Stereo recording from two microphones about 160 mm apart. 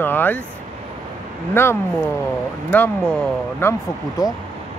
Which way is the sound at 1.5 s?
15° left (ahead or behind).